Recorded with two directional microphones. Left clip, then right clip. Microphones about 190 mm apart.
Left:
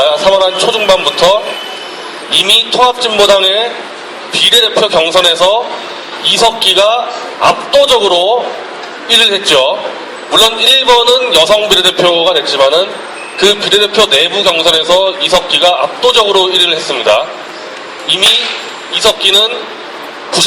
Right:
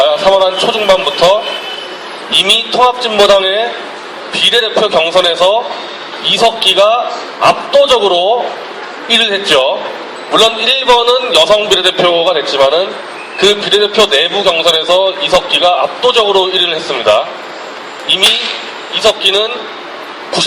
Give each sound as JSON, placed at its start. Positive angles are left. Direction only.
{"t": 0.0, "sound": "a man's voice", "side_deg": 55}
{"t": 2.4, "sound": "a man's voice", "side_deg": 50}
{"t": 19.0, "sound": "a man's voice", "side_deg": 55}